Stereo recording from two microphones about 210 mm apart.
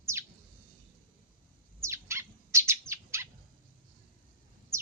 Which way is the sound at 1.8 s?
15° right (ahead or behind).